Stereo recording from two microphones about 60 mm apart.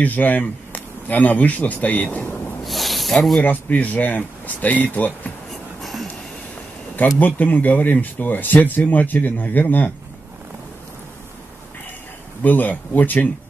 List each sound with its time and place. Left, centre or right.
0.0 s speech: left
2.6 s snake: centre
3.4 s speech: left
5.5 s music: centre
7.2 s speech: left
12.4 s speech: left